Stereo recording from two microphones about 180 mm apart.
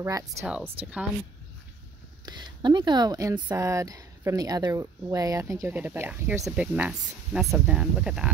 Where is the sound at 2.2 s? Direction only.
25° right (ahead or behind).